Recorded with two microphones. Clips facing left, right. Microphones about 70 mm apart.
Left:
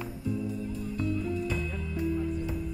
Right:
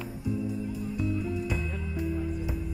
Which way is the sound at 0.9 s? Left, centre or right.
Centre.